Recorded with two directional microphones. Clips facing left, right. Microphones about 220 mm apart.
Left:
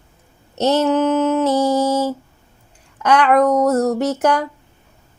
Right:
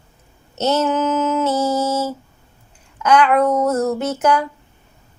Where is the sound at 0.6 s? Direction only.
35° left (ahead or behind).